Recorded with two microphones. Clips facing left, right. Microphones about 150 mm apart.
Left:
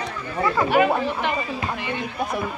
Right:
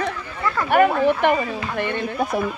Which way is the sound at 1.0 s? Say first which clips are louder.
Right 7 dB; 55° right (ahead or behind).